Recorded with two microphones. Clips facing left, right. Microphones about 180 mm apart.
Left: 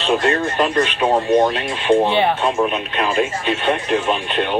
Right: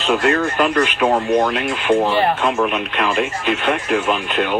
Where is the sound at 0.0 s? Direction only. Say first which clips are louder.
Right 1 dB; 30° left (ahead or behind).